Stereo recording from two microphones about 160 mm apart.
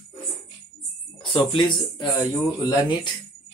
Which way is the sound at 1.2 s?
30° left (ahead or behind).